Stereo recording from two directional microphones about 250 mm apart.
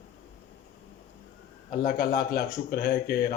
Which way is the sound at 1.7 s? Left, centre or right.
Left.